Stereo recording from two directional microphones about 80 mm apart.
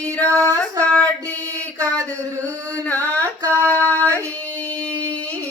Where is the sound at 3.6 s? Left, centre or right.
Right.